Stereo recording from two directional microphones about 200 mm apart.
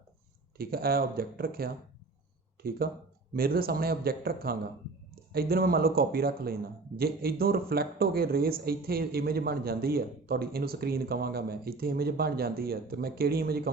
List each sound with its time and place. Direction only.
0.5 s speech: 50° right (ahead or behind)